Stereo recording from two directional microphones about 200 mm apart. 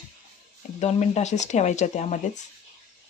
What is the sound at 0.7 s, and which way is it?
Speech, 35° left (ahead or behind).